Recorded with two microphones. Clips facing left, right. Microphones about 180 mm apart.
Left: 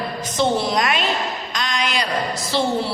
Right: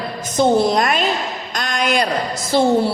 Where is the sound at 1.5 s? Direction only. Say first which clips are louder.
Right 6 dB; 50° right (ahead or behind).